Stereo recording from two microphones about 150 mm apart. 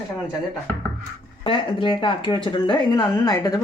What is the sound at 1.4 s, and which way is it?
Speech, 35° left (ahead or behind).